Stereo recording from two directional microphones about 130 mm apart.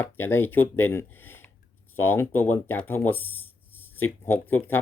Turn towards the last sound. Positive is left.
turn(degrees=15)  # may be behind; listen again after turning